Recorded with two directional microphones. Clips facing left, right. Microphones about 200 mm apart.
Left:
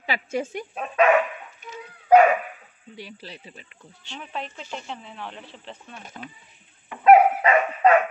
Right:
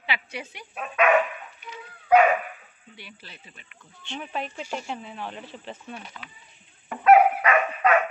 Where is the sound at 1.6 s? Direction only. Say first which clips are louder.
Left 3 dB; 45° left (ahead or behind).